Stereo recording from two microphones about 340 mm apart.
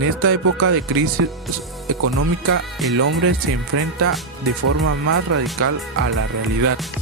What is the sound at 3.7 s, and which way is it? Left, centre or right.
Speech, right.